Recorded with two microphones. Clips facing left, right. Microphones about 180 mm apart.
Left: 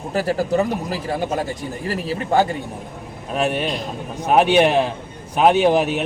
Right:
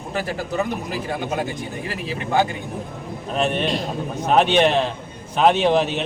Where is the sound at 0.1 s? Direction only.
40° left (ahead or behind).